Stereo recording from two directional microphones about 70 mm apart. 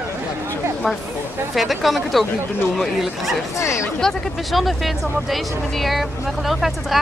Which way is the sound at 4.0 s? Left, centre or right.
Centre.